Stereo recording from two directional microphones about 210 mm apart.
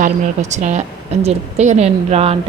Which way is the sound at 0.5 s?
35° right (ahead or behind).